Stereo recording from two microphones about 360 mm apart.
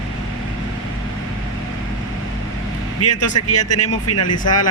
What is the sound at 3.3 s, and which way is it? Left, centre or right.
Speech, left.